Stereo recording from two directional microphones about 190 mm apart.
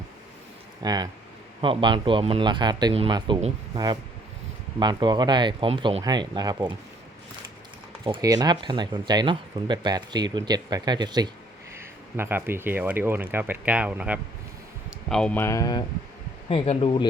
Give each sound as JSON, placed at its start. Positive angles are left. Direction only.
{"t": 0.8, "sound": "speech", "side_deg": -20}
{"t": 4.8, "sound": "speech", "side_deg": -25}
{"t": 8.0, "sound": "speech", "side_deg": -25}
{"t": 15.1, "sound": "speech", "side_deg": 5}
{"t": 16.5, "sound": "speech", "side_deg": 30}